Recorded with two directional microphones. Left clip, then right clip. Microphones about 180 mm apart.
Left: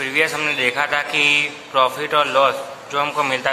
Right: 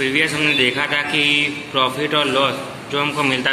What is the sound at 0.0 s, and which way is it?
A man's voice, 35° left (ahead or behind).